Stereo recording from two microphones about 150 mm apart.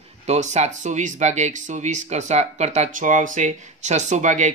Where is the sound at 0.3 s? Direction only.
50° right (ahead or behind).